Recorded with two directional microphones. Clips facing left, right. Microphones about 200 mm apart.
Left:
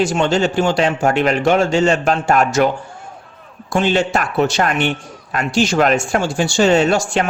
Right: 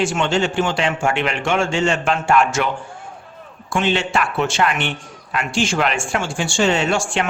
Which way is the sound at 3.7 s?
40° left (ahead or behind).